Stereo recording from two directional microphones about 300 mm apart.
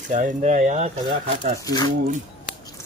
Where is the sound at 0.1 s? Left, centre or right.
Right.